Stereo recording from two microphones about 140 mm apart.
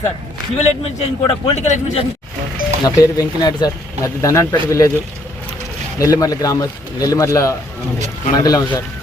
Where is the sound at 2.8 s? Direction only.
25° left (ahead or behind).